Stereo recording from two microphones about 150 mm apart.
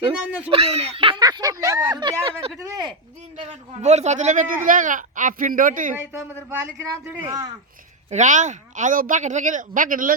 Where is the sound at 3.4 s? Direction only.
50° right (ahead or behind).